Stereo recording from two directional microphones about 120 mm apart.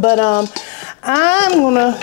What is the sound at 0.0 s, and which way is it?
Speech, 20° left (ahead or behind).